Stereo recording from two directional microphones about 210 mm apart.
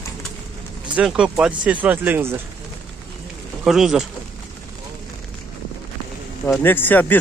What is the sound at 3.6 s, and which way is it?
Speech, centre (ahead or behind).